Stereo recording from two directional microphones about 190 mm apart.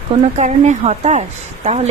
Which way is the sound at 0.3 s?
40° right (ahead or behind).